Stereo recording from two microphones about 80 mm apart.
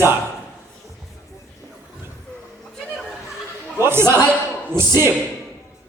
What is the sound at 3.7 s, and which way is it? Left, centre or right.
Speech, right.